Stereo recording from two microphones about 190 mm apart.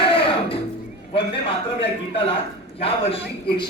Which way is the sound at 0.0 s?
30° left (ahead or behind).